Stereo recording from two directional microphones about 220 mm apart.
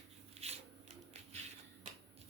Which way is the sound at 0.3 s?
30° right (ahead or behind).